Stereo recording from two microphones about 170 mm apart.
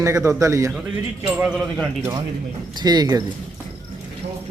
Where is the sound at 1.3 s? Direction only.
5° right (ahead or behind).